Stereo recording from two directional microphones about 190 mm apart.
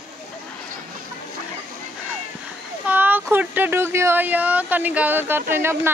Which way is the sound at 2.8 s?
10° right (ahead or behind).